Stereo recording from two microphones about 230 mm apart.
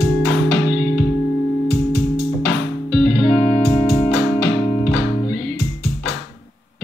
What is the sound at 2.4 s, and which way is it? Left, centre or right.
Music, centre.